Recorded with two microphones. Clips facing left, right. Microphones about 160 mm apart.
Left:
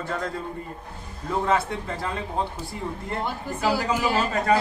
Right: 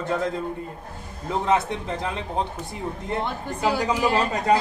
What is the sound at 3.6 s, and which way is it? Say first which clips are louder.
Speech: right 1 dB; 5° left (ahead or behind).